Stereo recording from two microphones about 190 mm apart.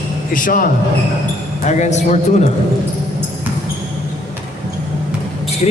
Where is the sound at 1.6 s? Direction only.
40° left (ahead or behind).